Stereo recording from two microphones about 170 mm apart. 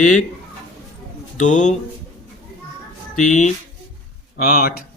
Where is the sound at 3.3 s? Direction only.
45° left (ahead or behind).